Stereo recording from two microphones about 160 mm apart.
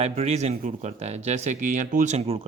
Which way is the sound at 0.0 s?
40° right (ahead or behind).